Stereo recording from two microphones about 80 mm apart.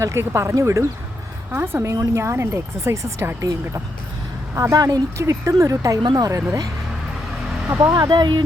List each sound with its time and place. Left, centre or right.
0.0 s speech: right
4.5 s speech: right
5.1 s speech: right
6.0 s speech: right
7.9 s speech: right